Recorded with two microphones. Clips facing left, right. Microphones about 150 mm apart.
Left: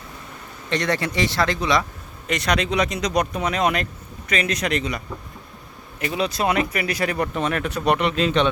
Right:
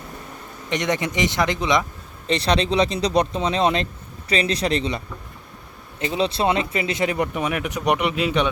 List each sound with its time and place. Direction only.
0.7 s speech: 20° right (ahead or behind)